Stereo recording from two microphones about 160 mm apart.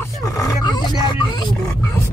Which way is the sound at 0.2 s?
20° left (ahead or behind).